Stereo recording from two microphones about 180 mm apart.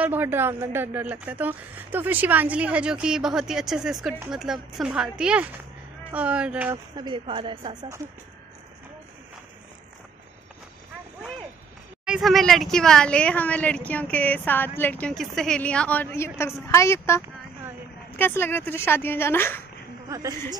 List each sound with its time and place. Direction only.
0.0 s speech: 10° right (ahead or behind)
7.0 s speech: 25° right (ahead or behind)
12.0 s speech: centre (ahead or behind)
20.1 s speech: 20° right (ahead or behind)